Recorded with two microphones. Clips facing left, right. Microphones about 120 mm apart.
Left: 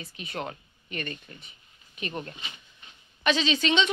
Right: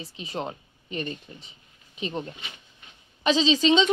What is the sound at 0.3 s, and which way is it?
Speech, 25° right (ahead or behind).